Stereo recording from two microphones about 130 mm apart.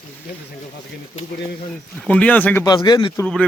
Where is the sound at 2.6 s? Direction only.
30° left (ahead or behind).